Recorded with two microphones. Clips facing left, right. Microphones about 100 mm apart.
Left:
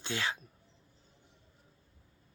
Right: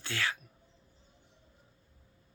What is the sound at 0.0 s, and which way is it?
Speech, 20° left (ahead or behind).